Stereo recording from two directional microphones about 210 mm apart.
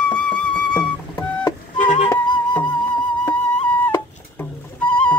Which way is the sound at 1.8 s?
35° left (ahead or behind).